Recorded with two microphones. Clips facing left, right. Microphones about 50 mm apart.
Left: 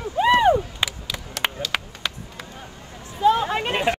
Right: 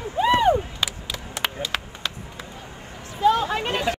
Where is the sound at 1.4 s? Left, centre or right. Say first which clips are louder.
Left 2 dB; centre.